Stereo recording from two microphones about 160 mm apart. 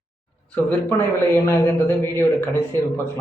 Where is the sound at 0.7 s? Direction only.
15° left (ahead or behind).